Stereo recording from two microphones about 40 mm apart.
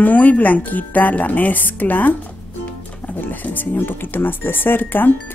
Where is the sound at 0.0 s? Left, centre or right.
Left.